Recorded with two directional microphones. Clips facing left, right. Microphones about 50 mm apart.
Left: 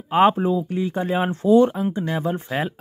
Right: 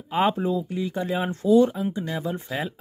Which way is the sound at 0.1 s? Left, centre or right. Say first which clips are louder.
Left 6 dB; left.